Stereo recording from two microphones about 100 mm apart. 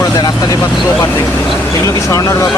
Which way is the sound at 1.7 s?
30° left (ahead or behind).